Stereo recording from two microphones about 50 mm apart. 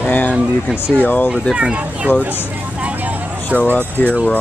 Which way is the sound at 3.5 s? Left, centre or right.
Left.